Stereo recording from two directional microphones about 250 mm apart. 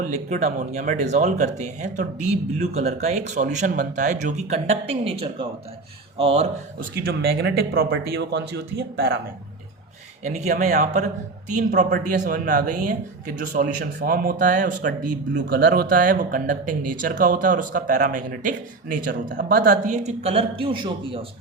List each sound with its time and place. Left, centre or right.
0.0 s speech: right
6.7 s speech: right
10.2 s speech: right